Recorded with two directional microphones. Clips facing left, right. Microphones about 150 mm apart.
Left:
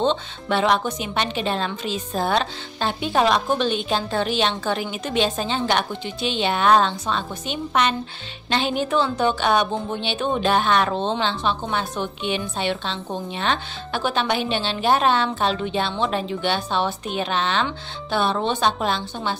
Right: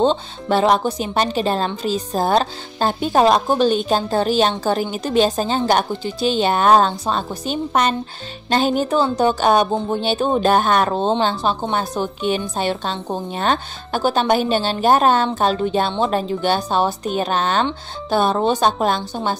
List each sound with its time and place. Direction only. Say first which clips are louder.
0.0 s a woman's voice: right 4 dB; 35° right (ahead or behind)